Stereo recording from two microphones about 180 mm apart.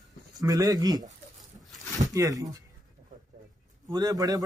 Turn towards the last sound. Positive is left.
turn(degrees=-20)  # may be behind; listen again after turning